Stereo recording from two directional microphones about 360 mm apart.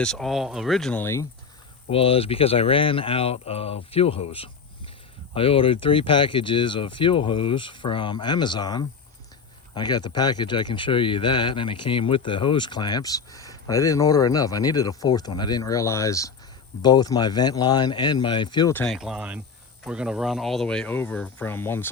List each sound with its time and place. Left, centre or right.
0.0 s speech: centre